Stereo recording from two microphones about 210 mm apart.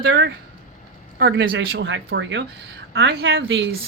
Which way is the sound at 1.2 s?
50° right (ahead or behind).